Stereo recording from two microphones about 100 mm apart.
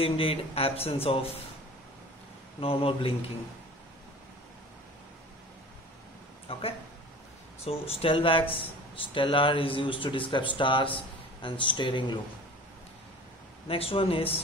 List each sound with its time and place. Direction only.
0.0 s speech: 75° left (ahead or behind)
2.6 s speech: 65° left (ahead or behind)
6.5 s speech: 70° left (ahead or behind)
7.6 s speech: 85° left; by 12.2 s 50° left (ahead or behind)
13.7 s speech: 70° left (ahead or behind)